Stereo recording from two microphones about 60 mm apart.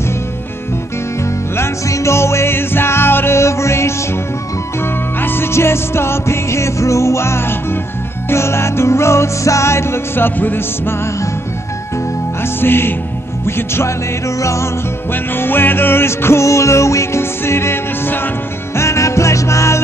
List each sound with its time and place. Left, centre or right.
1.9 s music: left
5.2 s music: left
12.5 s speech: left
13.5 s music: left
15.3 s music: left
18.8 s music: left